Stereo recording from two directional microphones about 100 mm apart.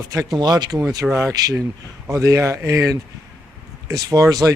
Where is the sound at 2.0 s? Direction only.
30° right (ahead or behind).